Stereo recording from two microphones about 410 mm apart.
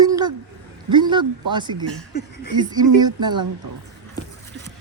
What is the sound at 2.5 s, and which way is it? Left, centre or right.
Speech, centre.